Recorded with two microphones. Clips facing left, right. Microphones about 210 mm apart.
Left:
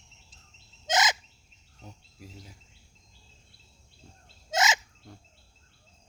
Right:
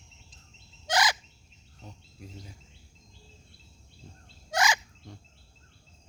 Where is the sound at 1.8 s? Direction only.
5° left (ahead or behind).